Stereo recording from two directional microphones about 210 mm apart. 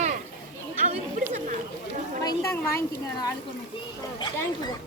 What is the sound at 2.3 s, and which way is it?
A woman's voice, 10° left (ahead or behind).